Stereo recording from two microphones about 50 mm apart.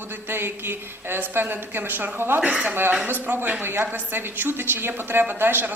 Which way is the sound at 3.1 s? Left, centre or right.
Right.